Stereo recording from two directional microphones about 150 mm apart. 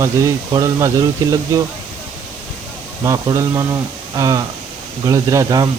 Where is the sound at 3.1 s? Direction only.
20° right (ahead or behind).